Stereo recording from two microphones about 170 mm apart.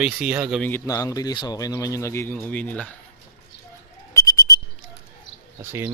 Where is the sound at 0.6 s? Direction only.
15° left (ahead or behind).